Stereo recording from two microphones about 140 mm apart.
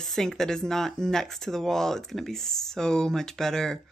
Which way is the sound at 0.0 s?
5° left (ahead or behind).